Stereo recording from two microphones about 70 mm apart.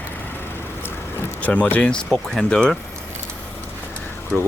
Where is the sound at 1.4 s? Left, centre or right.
Left.